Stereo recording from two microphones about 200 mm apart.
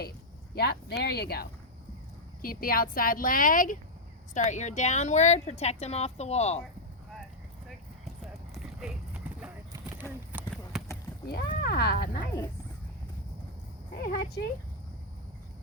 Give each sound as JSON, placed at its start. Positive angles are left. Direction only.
{"t": 0.5, "sound": "a woman's voice", "side_deg": 55}
{"t": 8.0, "sound": "clip-clop", "side_deg": 0}
{"t": 10.4, "sound": "run", "side_deg": 0}
{"t": 11.3, "sound": "speech", "side_deg": 50}
{"t": 14.0, "sound": "speech", "side_deg": 50}